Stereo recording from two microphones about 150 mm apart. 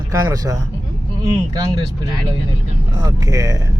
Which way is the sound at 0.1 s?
20° right (ahead or behind).